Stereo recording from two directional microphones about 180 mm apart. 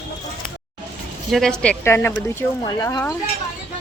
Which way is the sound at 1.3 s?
Centre (ahead or behind).